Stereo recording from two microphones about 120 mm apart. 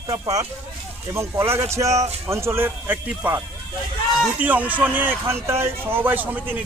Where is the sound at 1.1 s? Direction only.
20° right (ahead or behind).